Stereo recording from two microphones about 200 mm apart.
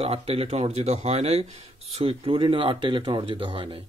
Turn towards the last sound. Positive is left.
turn(degrees=-25)  # may be behind; listen again after turning